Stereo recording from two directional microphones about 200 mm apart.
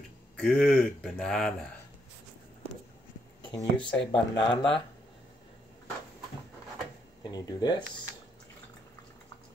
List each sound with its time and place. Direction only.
0.4 s speech: 5° left (ahead or behind)
3.4 s speech: 25° left (ahead or behind)
7.2 s speech: 20° left (ahead or behind)